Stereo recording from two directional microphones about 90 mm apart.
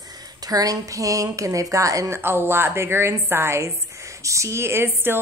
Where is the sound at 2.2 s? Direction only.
25° right (ahead or behind).